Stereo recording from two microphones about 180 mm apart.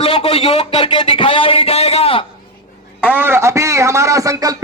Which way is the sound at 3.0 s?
10° right (ahead or behind).